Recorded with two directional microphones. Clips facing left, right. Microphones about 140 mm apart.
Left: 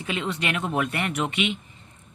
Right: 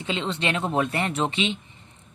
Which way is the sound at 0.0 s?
25° right (ahead or behind).